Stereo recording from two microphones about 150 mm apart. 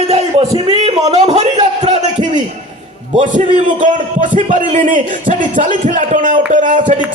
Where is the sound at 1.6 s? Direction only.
50° right (ahead or behind).